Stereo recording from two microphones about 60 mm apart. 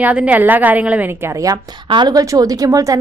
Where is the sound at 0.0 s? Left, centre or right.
Right.